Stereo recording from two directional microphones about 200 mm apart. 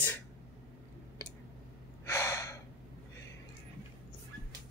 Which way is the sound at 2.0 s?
15° left (ahead or behind).